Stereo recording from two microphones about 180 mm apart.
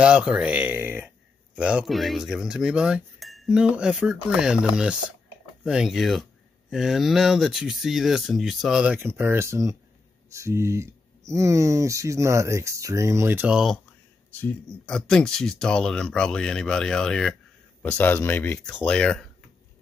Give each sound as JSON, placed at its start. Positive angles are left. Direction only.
{"t": 0.0, "sound": "speech", "side_deg": -5}
{"t": 14.3, "sound": "speech", "side_deg": 10}